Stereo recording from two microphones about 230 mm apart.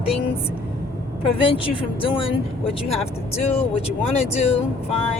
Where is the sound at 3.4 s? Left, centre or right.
Left.